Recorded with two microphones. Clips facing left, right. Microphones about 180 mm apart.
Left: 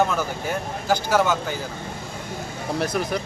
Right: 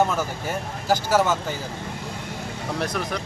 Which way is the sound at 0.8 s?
5° right (ahead or behind).